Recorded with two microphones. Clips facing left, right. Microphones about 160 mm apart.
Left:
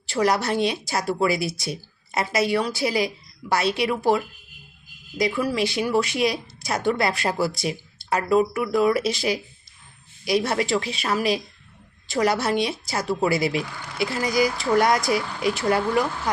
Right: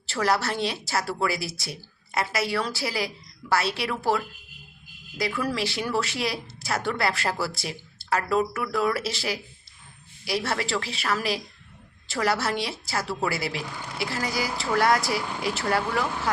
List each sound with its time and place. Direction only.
0.0 s a woman's voice: 15° left (ahead or behind)